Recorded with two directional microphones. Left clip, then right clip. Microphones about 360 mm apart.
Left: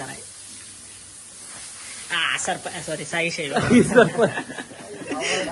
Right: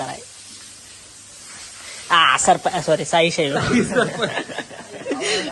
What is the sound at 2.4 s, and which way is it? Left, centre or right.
Speech, right.